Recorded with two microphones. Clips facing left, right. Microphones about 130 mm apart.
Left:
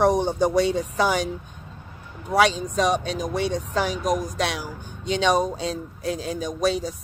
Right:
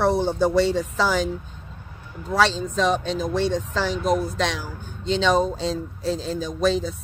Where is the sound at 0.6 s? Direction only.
75° right (ahead or behind).